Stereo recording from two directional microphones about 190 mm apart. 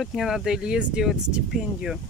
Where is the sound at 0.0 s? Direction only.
Centre (ahead or behind).